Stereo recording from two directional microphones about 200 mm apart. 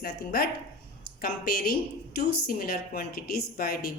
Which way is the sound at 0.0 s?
50° left (ahead or behind).